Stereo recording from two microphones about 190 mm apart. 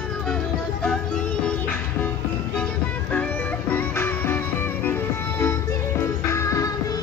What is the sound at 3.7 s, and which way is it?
Music, 10° left (ahead or behind).